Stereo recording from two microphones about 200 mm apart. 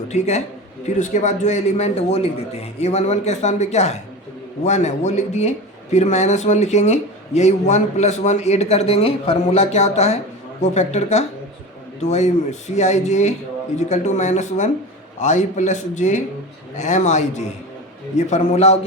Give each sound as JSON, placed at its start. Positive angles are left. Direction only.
{"t": 0.1, "sound": "a man's voice", "side_deg": 35}